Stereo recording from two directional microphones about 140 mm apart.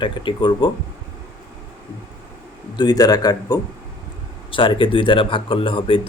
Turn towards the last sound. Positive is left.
turn(degrees=40)  # may be behind; listen again after turning